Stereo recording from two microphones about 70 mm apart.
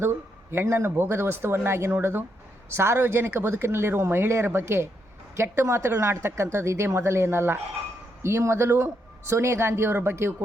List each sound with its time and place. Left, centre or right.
0.0 s speech: right